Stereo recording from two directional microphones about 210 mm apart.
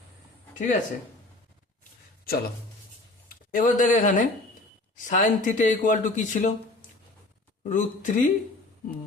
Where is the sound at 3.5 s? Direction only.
40° left (ahead or behind).